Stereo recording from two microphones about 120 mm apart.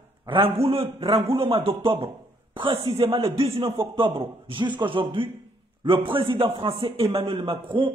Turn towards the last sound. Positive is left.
turn(degrees=-45)  # may be behind; listen again after turning